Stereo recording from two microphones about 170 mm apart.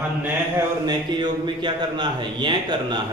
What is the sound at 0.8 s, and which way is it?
Speech, 25° right (ahead or behind).